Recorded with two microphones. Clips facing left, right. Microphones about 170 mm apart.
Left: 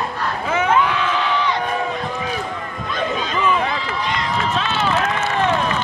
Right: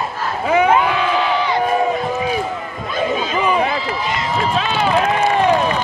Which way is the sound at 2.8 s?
5° right (ahead or behind).